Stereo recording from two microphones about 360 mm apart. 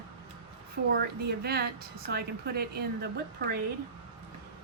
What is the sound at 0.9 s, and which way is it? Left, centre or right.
Speech, right.